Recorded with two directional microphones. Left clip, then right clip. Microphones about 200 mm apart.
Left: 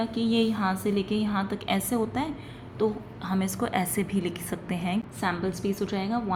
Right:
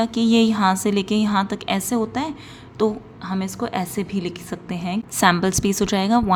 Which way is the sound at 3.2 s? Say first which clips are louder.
Right 3 dB; 15° right (ahead or behind).